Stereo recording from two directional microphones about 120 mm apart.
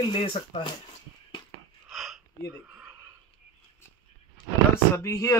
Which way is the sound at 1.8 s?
Centre (ahead or behind).